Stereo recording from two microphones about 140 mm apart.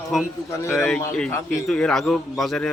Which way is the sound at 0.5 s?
20° left (ahead or behind).